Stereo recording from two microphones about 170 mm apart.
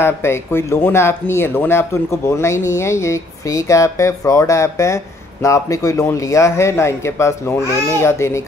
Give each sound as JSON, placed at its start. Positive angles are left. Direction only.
{"t": 0.0, "sound": "speech", "side_deg": 15}